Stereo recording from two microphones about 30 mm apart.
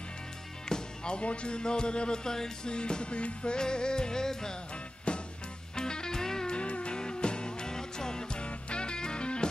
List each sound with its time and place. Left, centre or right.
0.7 s music: left
1.1 s speech: left; by 2.7 s centre
2.7 s music: left
3.5 s speech: left
5.1 s music: left
5.8 s music: left
6.5 s music: left